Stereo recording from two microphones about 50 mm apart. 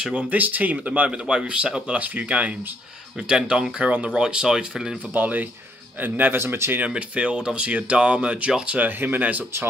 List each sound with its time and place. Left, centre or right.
0.0 s speech: right
0.3 s speech: right
3.2 s speech: centre
5.1 s speech: right
6.4 s speech: right
6.9 s speech: right
8.6 s speech: right